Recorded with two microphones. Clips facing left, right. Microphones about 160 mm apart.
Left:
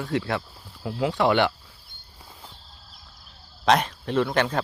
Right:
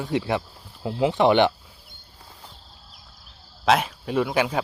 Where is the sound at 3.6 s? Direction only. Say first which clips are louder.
Even; 5° right (ahead or behind).